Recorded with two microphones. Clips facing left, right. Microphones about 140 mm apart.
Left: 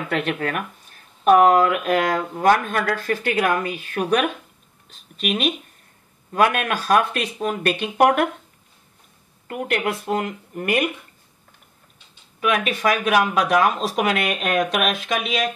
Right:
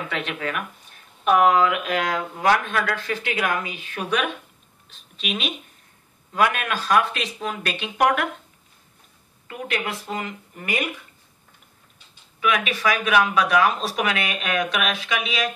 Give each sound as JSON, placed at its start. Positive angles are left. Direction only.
{"t": 0.1, "sound": "speech", "side_deg": 50}
{"t": 9.5, "sound": "speech", "side_deg": 55}
{"t": 12.4, "sound": "speech", "side_deg": 50}